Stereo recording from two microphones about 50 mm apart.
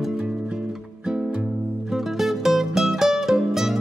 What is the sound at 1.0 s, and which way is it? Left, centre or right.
Music, right.